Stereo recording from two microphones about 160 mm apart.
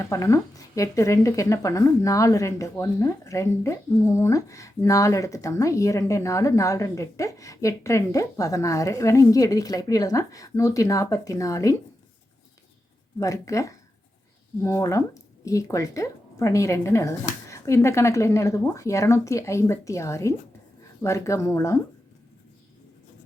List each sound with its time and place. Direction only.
0.0 s speech: 20° left (ahead or behind)
13.1 s speech: 20° left (ahead or behind)